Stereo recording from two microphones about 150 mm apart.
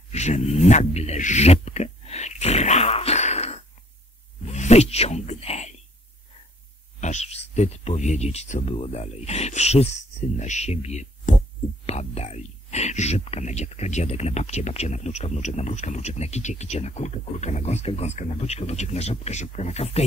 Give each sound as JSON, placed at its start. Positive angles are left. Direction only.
{"t": 0.1, "sound": "a sound", "side_deg": 50}
{"t": 4.5, "sound": "speech", "side_deg": 45}
{"t": 7.0, "sound": "speech", "side_deg": 50}